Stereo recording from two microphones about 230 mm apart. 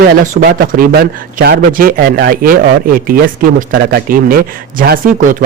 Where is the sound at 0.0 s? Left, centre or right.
Right.